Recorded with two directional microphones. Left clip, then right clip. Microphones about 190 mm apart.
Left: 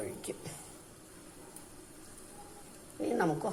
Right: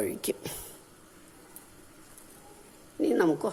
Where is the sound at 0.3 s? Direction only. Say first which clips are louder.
Right 9 dB; 50° right (ahead or behind).